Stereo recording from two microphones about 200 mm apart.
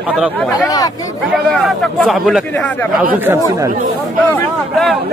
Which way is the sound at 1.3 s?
Centre (ahead or behind).